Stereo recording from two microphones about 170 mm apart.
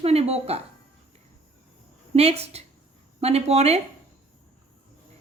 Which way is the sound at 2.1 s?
35° right (ahead or behind).